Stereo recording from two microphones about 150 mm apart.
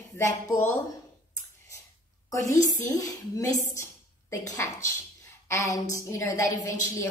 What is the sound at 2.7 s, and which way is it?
A woman's voice, 25° left (ahead or behind).